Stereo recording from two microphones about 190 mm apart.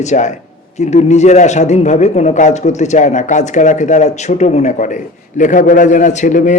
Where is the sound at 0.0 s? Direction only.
40° left (ahead or behind).